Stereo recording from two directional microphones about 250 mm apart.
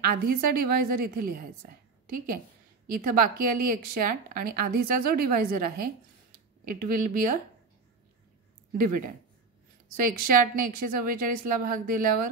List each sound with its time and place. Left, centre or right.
0.0 s a woman's voice: right
8.7 s a woman's voice: right
10.2 s a woman's voice: right